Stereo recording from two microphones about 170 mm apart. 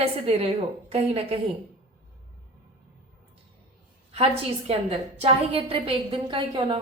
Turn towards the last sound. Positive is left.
turn(degrees=-25)  # may be behind; listen again after turning